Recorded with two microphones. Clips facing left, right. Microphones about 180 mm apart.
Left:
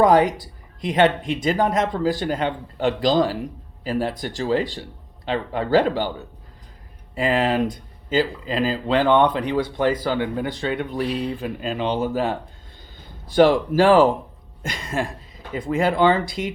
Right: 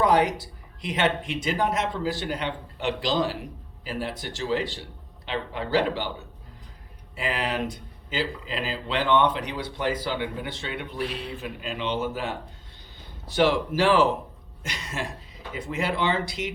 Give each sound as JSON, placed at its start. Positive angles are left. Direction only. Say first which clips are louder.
{"t": 0.0, "sound": "a sound", "louder": "left 5 dB", "side_deg": 45}
{"t": 0.8, "sound": "speech", "louder": "left 7 dB", "side_deg": 45}
{"t": 7.2, "sound": "speech", "louder": "left 8 dB", "side_deg": 45}
{"t": 13.3, "sound": "speech", "louder": "left 7 dB", "side_deg": 50}